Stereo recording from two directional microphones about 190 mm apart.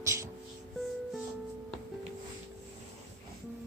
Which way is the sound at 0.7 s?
Centre (ahead or behind).